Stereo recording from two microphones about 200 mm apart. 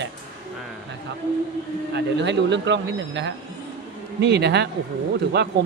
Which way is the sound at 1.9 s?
60° right (ahead or behind).